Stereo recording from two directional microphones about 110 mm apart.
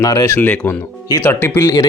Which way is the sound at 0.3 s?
15° left (ahead or behind).